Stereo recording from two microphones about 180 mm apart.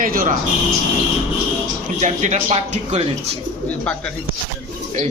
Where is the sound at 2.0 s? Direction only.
40° right (ahead or behind).